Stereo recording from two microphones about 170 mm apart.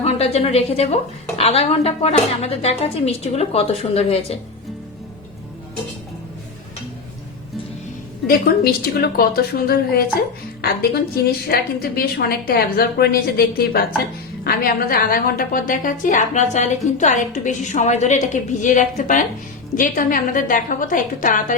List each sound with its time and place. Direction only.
0.0 s a woman's voice: 35° left (ahead or behind)
8.3 s a woman's voice: 65° left (ahead or behind); by 21.5 s 50° left (ahead or behind)